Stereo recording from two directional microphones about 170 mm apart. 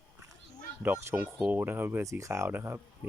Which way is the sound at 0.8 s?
10° right (ahead or behind).